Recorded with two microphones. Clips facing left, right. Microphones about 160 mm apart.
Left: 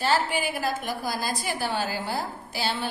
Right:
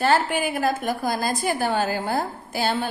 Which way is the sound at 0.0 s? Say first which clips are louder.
Right 4 dB; 50° right (ahead or behind).